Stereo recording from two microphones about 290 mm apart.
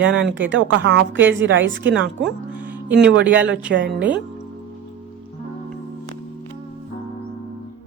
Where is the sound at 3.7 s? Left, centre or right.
Right.